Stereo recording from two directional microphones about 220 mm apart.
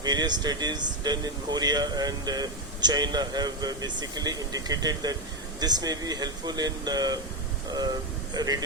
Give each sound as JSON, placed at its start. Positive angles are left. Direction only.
{"t": 0.0, "sound": "speech", "side_deg": -20}
{"t": 8.3, "sound": "speech", "side_deg": -15}